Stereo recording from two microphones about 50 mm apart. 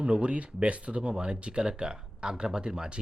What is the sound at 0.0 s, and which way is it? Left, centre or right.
Speech, right.